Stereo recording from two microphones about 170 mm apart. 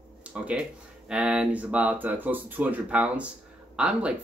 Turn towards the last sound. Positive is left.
turn(degrees=-5)  # may be behind; listen again after turning